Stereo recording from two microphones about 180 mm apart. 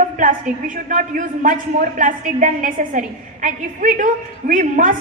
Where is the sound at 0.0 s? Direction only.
45° right (ahead or behind).